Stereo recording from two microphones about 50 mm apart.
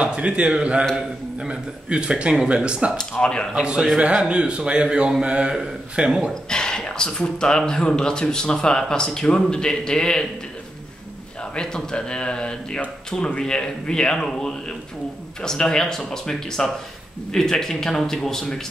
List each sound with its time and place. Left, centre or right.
0.0 s a man's voice: right
3.0 s speech: centre
3.6 s a man's voice: centre
6.5 s a sound: centre
7.2 s speech: centre
11.5 s speech: centre